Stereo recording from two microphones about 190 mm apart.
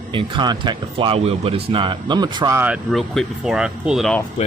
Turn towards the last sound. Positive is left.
turn(degrees=0)  # may be behind; listen again after turning